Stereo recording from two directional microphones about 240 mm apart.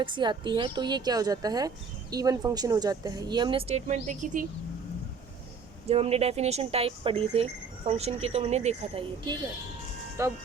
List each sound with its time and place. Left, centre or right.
0.0 s speech: centre
5.9 s speech: right